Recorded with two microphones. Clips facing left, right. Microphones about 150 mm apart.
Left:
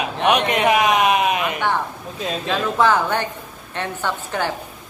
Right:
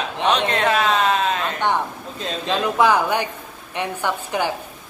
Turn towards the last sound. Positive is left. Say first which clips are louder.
# right 1 dB
turn(degrees=-15)  # may be behind; listen again after turning